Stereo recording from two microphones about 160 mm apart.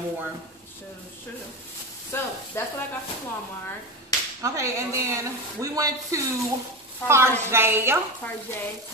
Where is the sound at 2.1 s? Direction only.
15° left (ahead or behind).